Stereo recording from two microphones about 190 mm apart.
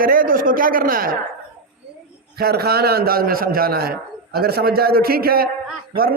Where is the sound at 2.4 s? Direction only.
55° right (ahead or behind).